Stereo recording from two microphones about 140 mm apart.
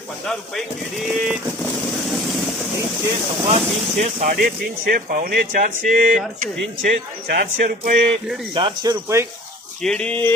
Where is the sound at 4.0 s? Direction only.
65° right (ahead or behind).